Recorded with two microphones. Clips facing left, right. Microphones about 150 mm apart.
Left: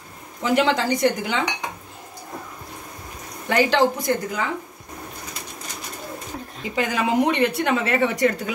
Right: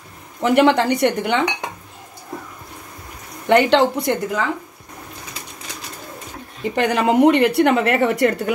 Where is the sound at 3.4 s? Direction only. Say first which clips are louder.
Right 4 dB; 65° right (ahead or behind).